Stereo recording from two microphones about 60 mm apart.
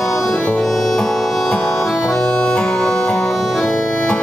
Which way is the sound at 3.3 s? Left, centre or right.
Centre.